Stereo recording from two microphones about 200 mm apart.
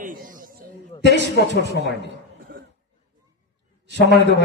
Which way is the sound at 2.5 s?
50° right (ahead or behind).